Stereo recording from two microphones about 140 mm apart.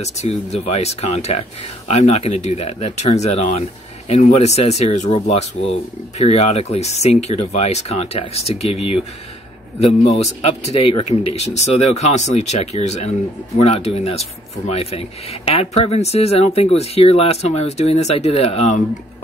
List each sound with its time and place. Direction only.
0.0 s speech: 50° left (ahead or behind)
10.4 s speech: 45° left (ahead or behind)